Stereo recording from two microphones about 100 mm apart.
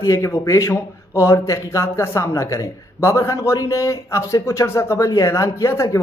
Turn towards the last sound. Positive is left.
turn(degrees=30)  # may be behind; listen again after turning